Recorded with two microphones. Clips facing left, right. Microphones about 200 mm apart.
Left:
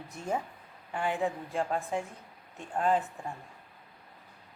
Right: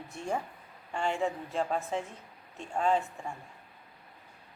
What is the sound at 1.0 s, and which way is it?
Speech, 15° left (ahead or behind).